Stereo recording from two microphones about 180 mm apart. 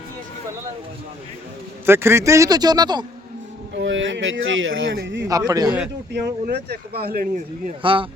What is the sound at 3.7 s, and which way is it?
Speech, 90° right.